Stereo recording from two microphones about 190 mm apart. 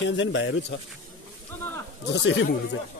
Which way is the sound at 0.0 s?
75° left (ahead or behind).